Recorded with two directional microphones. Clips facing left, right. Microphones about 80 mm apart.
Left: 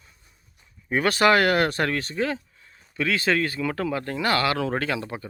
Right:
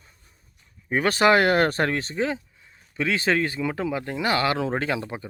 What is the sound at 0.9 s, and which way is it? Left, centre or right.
Speech, right.